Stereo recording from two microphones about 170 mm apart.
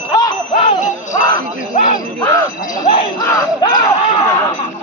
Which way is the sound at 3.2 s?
20° left (ahead or behind).